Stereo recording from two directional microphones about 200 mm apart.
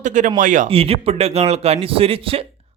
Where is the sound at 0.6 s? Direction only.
30° right (ahead or behind).